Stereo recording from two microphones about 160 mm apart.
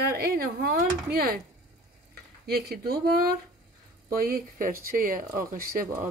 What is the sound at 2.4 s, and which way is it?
Speech, 75° right (ahead or behind).